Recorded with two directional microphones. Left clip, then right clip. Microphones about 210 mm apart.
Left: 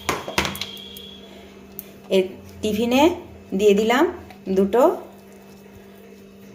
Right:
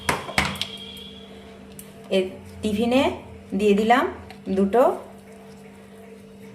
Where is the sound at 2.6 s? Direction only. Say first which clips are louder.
Left 3 dB; 25° left (ahead or behind).